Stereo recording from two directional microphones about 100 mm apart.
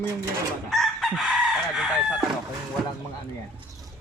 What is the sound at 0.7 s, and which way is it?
Chicken, 5° right (ahead or behind).